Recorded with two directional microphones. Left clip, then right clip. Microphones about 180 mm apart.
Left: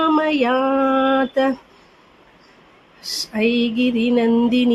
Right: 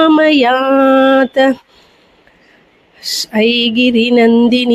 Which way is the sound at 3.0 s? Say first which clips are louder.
Right 7 dB; 45° right (ahead or behind).